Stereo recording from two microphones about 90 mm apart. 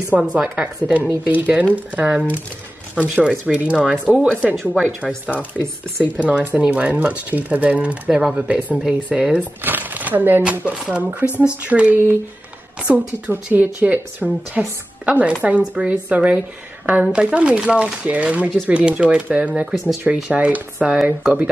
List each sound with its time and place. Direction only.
0.2 s speech: 10° right (ahead or behind)
19.7 s speech: centre (ahead or behind)